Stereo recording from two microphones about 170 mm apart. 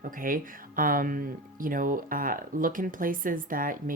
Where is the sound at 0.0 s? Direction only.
55° right (ahead or behind).